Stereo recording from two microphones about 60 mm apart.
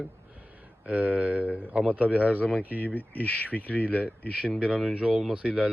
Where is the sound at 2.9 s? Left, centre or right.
Left.